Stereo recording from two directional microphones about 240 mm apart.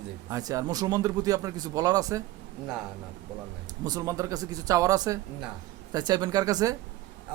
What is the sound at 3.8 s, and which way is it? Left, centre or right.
Speech, centre.